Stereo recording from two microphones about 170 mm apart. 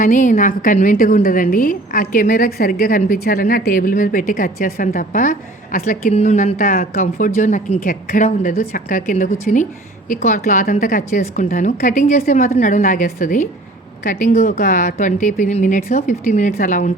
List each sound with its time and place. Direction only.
0.0 s speech: 50° left (ahead or behind)
2.5 s speech: 65° left (ahead or behind); by 17.0 s 50° left (ahead or behind)